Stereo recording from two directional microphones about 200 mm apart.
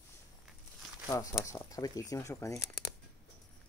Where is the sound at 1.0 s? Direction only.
15° left (ahead or behind).